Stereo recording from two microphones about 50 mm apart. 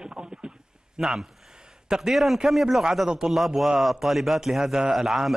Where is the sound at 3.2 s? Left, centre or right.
Centre.